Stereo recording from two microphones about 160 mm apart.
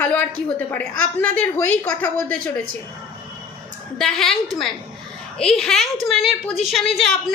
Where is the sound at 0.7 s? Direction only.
10° left (ahead or behind).